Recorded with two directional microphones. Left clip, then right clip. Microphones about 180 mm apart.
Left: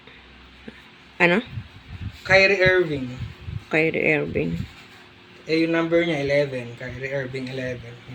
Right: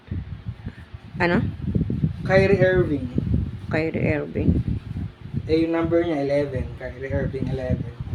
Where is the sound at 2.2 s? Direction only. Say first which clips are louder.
Left 2 dB; 40° right (ahead or behind).